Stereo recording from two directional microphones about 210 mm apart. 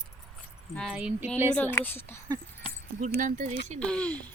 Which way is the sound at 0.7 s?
5° left (ahead or behind).